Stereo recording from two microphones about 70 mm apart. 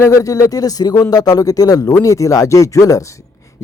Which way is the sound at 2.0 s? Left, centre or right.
Left.